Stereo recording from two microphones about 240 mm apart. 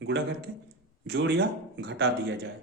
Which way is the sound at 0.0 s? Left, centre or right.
Right.